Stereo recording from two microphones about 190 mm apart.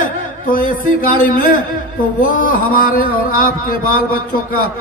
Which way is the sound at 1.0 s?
50° left (ahead or behind).